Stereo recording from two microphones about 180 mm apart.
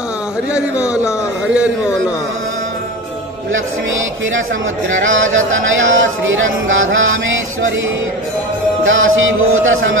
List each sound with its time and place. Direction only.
0.5 s a man's voice: 5° right (ahead or behind)
5.0 s speech: 90° right
8.8 s speech: 90° right